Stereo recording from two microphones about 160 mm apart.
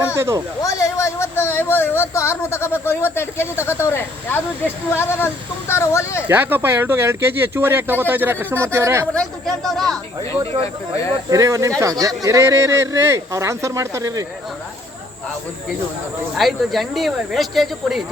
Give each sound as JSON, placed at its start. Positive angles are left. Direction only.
{"t": 0.2, "sound": "speech", "side_deg": -15}
{"t": 0.6, "sound": "a sound", "side_deg": 20}
{"t": 2.5, "sound": "speech", "side_deg": 15}
{"t": 6.2, "sound": "speech", "side_deg": -15}
{"t": 9.1, "sound": "speech", "side_deg": 0}
{"t": 11.3, "sound": "speech", "side_deg": -20}
{"t": 16.3, "sound": "speech", "side_deg": 0}